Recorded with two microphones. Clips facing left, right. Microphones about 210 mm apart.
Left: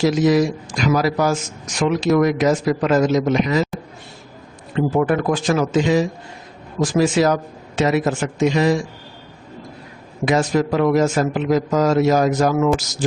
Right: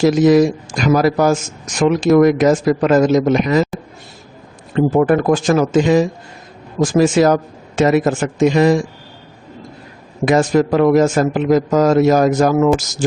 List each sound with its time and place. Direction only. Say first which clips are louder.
0.0 s speech: right 5 dB; 50° right (ahead or behind)
4.7 s speech: right 5 dB; 45° right (ahead or behind)
10.2 s speech: right 4 dB; 50° right (ahead or behind)